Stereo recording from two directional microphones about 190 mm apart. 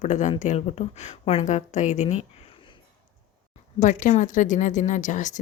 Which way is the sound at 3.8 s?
40° left (ahead or behind).